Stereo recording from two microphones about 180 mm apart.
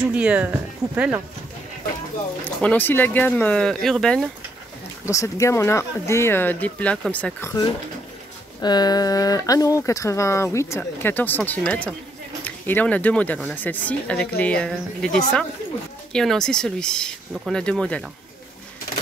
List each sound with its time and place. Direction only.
0.1 s speech: 5° right (ahead or behind)
2.4 s speech: 10° left (ahead or behind)
5.0 s speech: 15° left (ahead or behind)
8.5 s speech: 20° left (ahead or behind)
16.1 s speech: 5° left (ahead or behind)